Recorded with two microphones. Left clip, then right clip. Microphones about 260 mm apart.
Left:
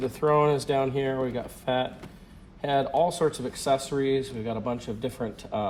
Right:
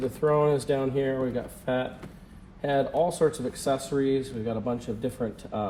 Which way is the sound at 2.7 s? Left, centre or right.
Centre.